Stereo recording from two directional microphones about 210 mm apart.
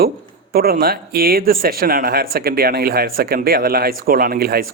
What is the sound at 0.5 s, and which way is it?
Speech, 45° right (ahead or behind).